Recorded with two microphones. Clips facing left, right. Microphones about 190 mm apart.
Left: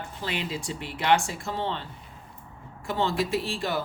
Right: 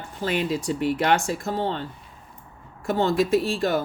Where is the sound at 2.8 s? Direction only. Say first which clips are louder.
Right 5 dB; 45° right (ahead or behind).